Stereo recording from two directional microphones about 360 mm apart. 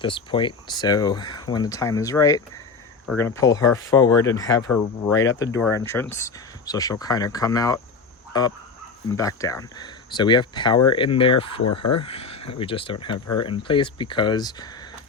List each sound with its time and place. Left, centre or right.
0.0 s speech: centre
8.3 s fowl: centre
9.0 s speech: centre